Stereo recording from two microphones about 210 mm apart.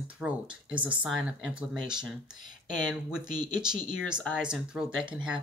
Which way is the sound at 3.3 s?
20° right (ahead or behind).